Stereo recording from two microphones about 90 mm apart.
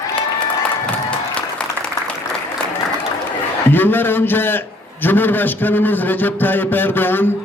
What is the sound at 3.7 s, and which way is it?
A man's voice, 20° left (ahead or behind).